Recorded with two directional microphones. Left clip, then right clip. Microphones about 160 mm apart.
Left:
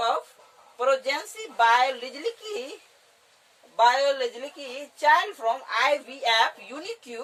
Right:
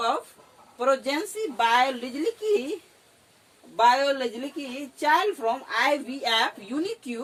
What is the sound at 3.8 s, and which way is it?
A woman's voice, 25° left (ahead or behind).